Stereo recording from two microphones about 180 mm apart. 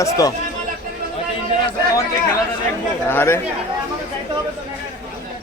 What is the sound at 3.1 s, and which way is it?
Speech, 15° left (ahead or behind).